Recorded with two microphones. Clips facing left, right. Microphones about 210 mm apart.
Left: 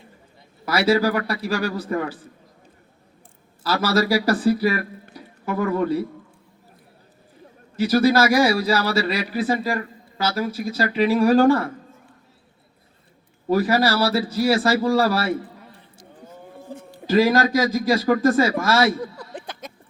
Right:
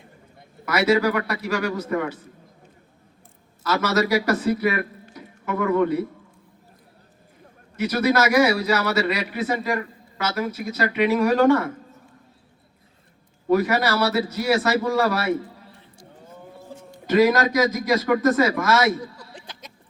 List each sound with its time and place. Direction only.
0.6 s a man's voice: 30° left (ahead or behind)
3.6 s a man's voice: 30° left (ahead or behind)
7.8 s a man's voice: 30° left (ahead or behind)
13.5 s a man's voice: 30° left (ahead or behind)
16.9 s a man's voice: 30° left (ahead or behind)
19.3 s a sound: 55° left (ahead or behind)